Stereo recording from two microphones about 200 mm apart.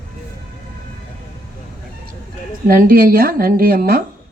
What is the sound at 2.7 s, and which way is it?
Speech, 45° right (ahead or behind).